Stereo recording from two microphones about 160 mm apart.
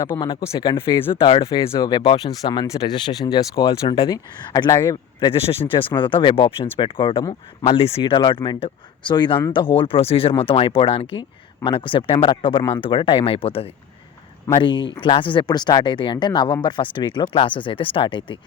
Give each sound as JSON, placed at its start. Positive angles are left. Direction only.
{"t": 0.1, "sound": "speech", "side_deg": 20}
{"t": 5.3, "sound": "speech", "side_deg": 35}